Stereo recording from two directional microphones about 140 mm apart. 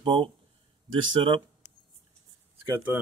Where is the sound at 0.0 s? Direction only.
35° right (ahead or behind).